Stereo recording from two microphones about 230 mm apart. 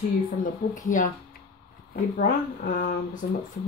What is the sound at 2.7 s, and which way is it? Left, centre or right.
Speech, left.